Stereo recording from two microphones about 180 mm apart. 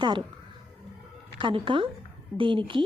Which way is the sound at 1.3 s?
30° right (ahead or behind).